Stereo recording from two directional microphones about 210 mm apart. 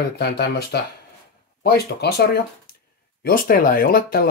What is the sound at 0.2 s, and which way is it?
Speech, 50° left (ahead or behind).